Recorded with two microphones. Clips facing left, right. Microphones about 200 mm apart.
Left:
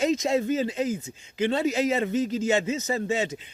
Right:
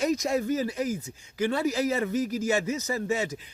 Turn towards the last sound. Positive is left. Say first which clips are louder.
# left 2 dB
turn(degrees=25)  # may be behind; listen again after turning